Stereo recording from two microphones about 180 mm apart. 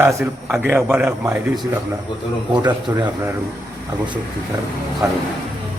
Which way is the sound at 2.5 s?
25° right (ahead or behind).